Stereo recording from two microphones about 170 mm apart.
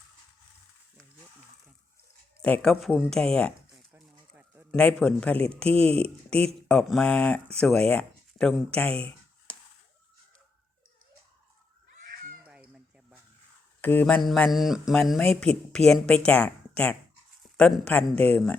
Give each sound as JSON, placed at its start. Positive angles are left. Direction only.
{"t": 2.4, "sound": "speech", "side_deg": 5}
{"t": 3.8, "sound": "a sound", "side_deg": -5}
{"t": 4.8, "sound": "speech", "side_deg": 5}
{"t": 5.6, "sound": "speech", "side_deg": -35}
{"t": 6.4, "sound": "speech", "side_deg": 5}
{"t": 12.7, "sound": "a sound", "side_deg": -5}
{"t": 13.8, "sound": "speech", "side_deg": 10}